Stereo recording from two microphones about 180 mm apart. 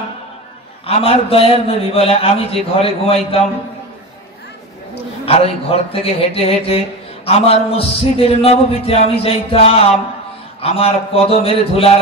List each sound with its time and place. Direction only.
0.8 s a man's voice: 35° left (ahead or behind)
5.2 s a man's voice: 35° left (ahead or behind)